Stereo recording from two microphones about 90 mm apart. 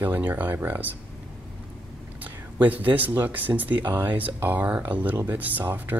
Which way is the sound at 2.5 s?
20° right (ahead or behind).